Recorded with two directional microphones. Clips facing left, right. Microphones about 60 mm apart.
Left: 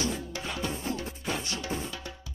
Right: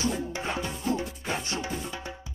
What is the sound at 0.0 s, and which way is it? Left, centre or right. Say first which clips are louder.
Music: right 3 dB; right.